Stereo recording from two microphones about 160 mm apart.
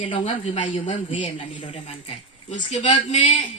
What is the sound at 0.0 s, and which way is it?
Speech, 35° left (ahead or behind).